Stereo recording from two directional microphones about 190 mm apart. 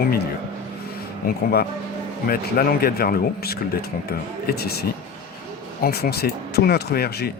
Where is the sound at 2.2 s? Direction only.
50° left (ahead or behind).